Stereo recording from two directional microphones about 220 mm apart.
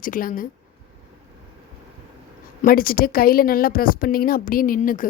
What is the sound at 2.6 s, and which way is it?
Speech, 40° left (ahead or behind).